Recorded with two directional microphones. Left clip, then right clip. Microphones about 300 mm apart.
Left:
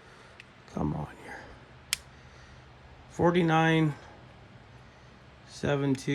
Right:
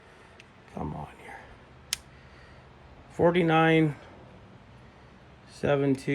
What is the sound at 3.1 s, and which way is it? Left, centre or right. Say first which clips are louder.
Speech: right 2 dB; centre.